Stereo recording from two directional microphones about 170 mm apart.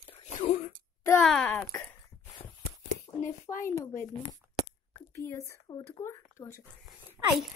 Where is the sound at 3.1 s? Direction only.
20° left (ahead or behind).